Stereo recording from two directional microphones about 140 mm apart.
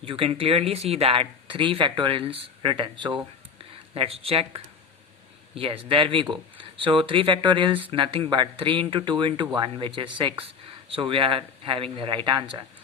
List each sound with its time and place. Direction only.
0.0 s speech: 40° right (ahead or behind)